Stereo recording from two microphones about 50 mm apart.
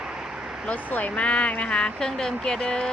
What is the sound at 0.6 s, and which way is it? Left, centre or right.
Speech, left.